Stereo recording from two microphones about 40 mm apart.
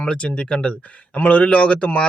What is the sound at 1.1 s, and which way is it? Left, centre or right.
Speech, left.